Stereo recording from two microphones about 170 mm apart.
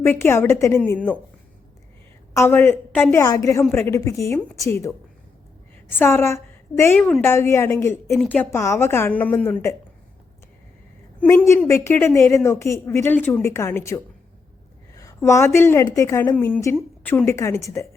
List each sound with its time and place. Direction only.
0.0 s a woman's voice: 15° left (ahead or behind)
2.3 s a woman's voice: 15° left (ahead or behind)
8.1 s a woman's voice: 5° left (ahead or behind)
11.2 s a woman's voice: 10° left (ahead or behind)